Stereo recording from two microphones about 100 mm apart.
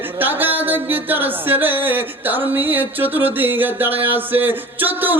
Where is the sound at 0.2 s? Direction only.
20° right (ahead or behind).